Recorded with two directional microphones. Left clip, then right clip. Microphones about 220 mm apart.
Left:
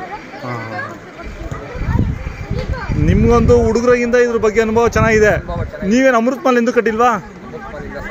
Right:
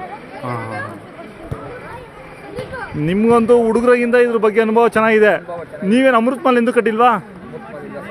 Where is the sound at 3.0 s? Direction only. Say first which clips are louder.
Even; 10° right (ahead or behind).